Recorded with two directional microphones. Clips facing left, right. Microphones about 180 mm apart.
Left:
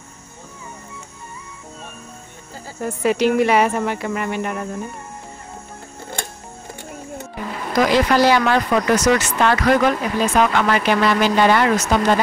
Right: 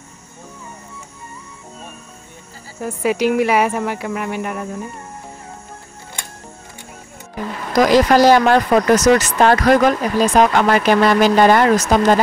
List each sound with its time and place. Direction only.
2.8 s speech: 5° right (ahead or behind)
7.7 s speech: 40° right (ahead or behind)